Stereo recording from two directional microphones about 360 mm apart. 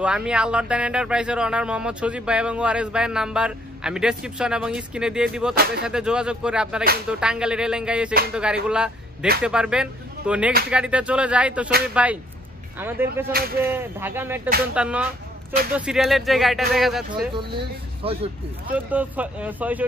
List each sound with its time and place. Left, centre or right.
0.0 s speech: centre
13.3 s speech: right
13.7 s speech: centre
17.4 s speech: centre
18.9 s speech: centre